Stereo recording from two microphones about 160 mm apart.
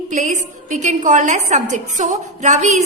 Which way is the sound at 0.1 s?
50° right (ahead or behind).